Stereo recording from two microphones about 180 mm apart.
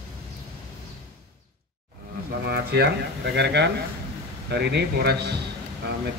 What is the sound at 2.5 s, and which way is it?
Speech, 65° right (ahead or behind).